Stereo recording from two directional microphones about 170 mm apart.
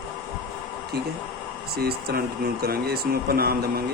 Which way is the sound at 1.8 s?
65° right (ahead or behind).